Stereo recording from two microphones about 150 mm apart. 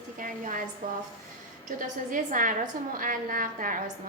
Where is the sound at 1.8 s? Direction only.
60° right (ahead or behind).